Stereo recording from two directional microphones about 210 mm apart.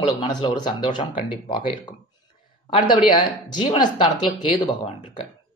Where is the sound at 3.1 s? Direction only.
20° left (ahead or behind).